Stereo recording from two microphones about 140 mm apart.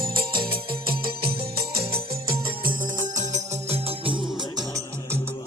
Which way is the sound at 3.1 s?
50° right (ahead or behind).